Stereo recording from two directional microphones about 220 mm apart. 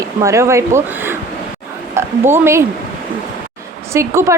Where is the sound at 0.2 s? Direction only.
15° right (ahead or behind).